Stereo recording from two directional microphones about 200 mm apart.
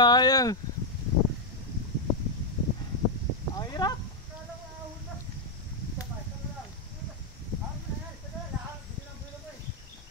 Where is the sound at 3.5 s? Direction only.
20° left (ahead or behind).